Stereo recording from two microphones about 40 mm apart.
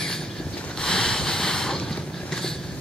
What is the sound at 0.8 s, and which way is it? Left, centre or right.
Boat, centre.